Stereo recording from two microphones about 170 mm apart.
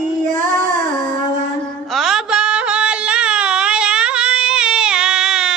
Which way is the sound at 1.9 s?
Centre (ahead or behind).